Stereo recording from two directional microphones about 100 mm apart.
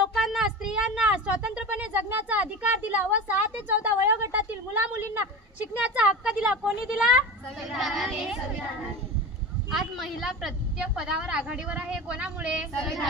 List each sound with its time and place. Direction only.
0.1 s a sound: 5° right (ahead or behind); by 5.2 s 20° right (ahead or behind)
5.7 s a woman's voice: 10° right (ahead or behind)
9.7 s a woman's voice: centre (ahead or behind)